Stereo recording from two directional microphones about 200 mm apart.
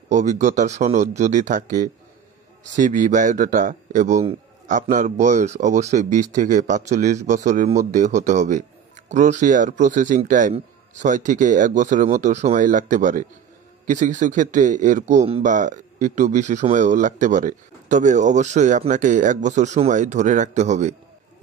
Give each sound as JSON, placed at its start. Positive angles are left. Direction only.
{"t": 0.1, "sound": "speech", "side_deg": -40}